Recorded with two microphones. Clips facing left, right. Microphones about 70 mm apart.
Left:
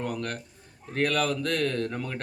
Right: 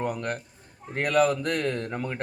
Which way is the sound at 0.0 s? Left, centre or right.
Right.